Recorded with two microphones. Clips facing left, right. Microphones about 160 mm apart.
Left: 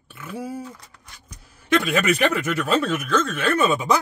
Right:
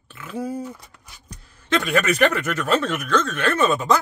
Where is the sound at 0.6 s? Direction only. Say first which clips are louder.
Right 4 dB; 15° right (ahead or behind).